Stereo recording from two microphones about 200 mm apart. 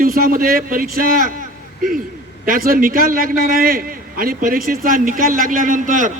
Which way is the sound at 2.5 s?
45° right (ahead or behind).